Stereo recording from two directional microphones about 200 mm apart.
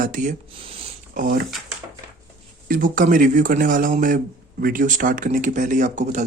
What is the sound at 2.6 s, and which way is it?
Speech, 45° right (ahead or behind).